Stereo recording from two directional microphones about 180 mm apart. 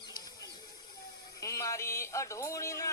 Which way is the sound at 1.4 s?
15° left (ahead or behind).